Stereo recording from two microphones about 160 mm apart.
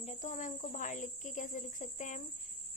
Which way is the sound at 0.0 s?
45° left (ahead or behind).